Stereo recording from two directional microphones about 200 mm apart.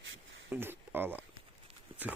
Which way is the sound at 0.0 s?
75° right (ahead or behind).